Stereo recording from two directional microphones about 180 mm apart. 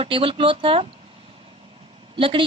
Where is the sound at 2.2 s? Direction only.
30° right (ahead or behind).